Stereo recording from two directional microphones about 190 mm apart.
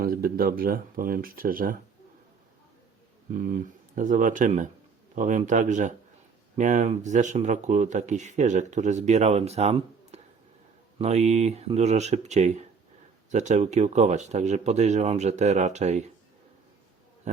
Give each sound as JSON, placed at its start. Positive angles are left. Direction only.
{"t": 0.0, "sound": "speech", "side_deg": -50}
{"t": 3.3, "sound": "speech", "side_deg": -45}
{"t": 17.3, "sound": "a sound", "side_deg": -40}